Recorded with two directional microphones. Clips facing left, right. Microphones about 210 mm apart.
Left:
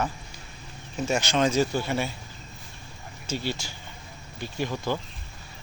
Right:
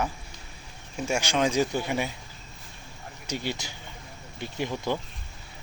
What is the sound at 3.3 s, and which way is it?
Speech, 15° right (ahead or behind).